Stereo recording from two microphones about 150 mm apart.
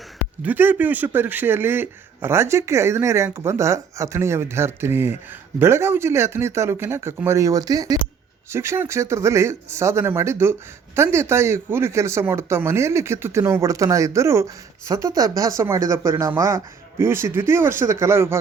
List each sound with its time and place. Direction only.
0.4 s speech: 10° right (ahead or behind)